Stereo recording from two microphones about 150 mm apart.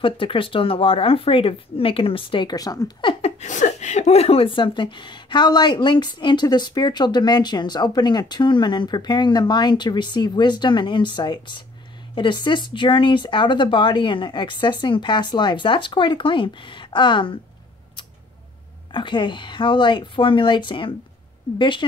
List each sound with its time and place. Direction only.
0.0 s speech: 35° left (ahead or behind)
18.9 s speech: 30° left (ahead or behind)